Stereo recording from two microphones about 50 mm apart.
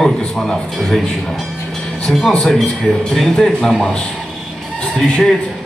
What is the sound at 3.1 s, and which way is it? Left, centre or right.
Speech, centre.